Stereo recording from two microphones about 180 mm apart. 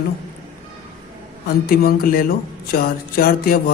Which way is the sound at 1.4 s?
55° left (ahead or behind).